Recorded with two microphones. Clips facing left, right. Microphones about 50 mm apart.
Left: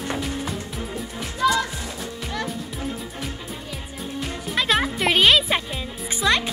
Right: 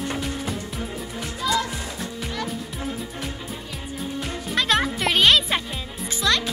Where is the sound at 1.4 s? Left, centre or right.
Left.